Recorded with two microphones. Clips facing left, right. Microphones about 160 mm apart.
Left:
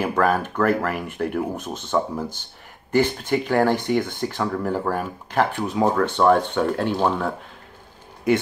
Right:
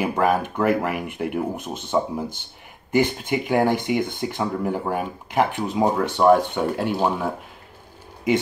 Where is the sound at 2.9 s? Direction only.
15° right (ahead or behind).